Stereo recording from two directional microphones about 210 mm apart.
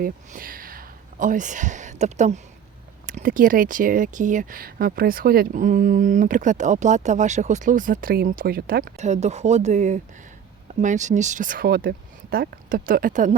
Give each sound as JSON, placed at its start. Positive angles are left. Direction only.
{"t": 0.0, "sound": "speech", "side_deg": -40}